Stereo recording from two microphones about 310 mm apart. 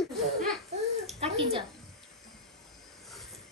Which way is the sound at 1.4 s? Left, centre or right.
Centre.